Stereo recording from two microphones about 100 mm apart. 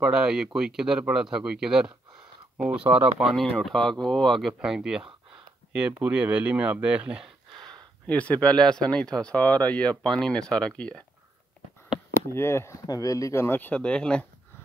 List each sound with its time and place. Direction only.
0.0 s speech: 10° right (ahead or behind)
3.3 s speech: 5° left (ahead or behind)
8.1 s speech: 15° left (ahead or behind)
12.3 s speech: 25° left (ahead or behind)
12.8 s speech: 35° left (ahead or behind); by 14.2 s 10° left (ahead or behind)